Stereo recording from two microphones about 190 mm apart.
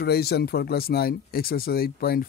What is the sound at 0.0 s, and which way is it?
Speech, 55° left (ahead or behind).